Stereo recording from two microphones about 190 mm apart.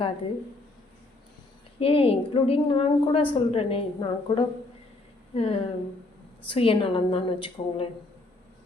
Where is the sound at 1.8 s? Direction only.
30° left (ahead or behind).